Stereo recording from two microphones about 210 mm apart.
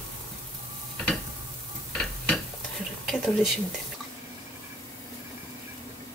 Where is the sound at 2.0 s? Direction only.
Centre (ahead or behind).